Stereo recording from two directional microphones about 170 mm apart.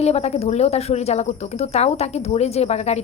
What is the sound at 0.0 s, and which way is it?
Speech, 40° left (ahead or behind).